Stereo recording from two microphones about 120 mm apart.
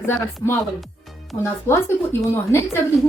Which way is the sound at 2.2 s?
25° left (ahead or behind).